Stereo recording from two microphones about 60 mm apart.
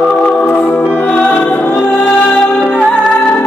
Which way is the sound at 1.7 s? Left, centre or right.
Centre.